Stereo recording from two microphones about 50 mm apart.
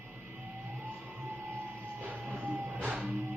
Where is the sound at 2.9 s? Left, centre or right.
Centre.